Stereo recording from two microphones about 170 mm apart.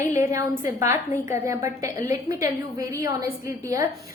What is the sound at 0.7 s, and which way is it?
A woman's voice, 15° right (ahead or behind).